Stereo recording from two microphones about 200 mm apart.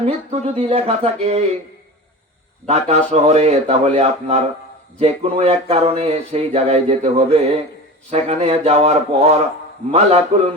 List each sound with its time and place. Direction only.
0.0 s speech: 30° right (ahead or behind)
2.6 s speech: 35° right (ahead or behind)